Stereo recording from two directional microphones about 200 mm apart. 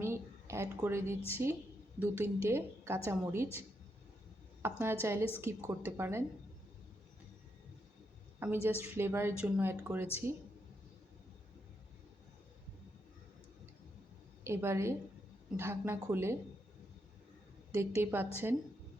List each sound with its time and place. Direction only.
0.0 s a sound: 15° right (ahead or behind)
1.3 s a woman's voice: 10° right (ahead or behind)
4.6 s a woman's voice: 10° right (ahead or behind)
8.4 s a woman's voice: 10° right (ahead or behind)
14.4 s a woman's voice: 15° right (ahead or behind)
17.7 s a woman's voice: 15° right (ahead or behind)